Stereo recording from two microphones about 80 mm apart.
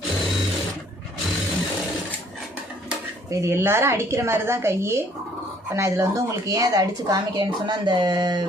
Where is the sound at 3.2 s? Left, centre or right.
Right.